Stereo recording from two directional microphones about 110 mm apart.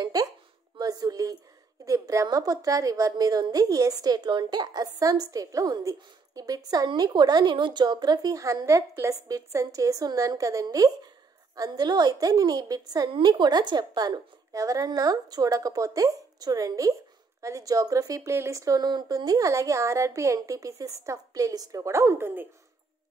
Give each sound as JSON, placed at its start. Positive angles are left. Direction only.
{"t": 0.0, "sound": "a sound", "side_deg": -35}
{"t": 1.9, "sound": "speech", "side_deg": -30}
{"t": 13.1, "sound": "a woman's voice", "side_deg": -45}